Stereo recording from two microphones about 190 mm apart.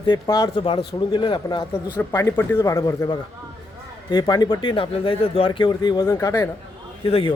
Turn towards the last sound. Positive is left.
turn(degrees=30)  # may be behind; listen again after turning